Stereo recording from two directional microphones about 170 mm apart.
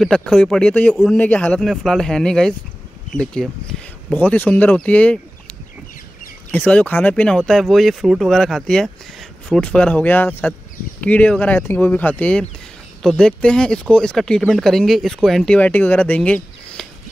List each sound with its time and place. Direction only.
0.0 s speech: 5° left (ahead or behind)
6.5 s speech: 10° left (ahead or behind)